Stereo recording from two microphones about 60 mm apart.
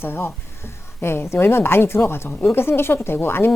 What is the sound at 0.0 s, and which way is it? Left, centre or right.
Speech, left.